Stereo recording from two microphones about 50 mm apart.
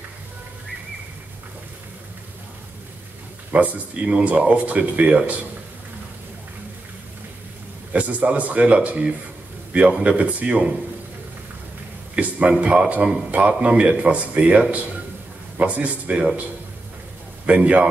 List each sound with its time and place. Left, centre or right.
3.5 s speech: right
7.9 s a man's voice: right
12.2 s speech: right
17.5 s speech: right